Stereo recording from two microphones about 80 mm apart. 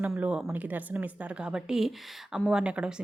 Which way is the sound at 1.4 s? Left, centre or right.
Centre.